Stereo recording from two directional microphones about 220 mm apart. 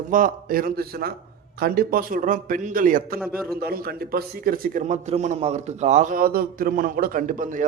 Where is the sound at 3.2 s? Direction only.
5° right (ahead or behind).